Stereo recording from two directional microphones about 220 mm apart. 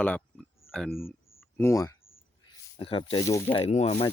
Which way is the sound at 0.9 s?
40° left (ahead or behind).